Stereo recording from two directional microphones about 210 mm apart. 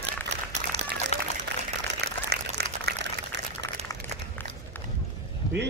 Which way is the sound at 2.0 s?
50° right (ahead or behind).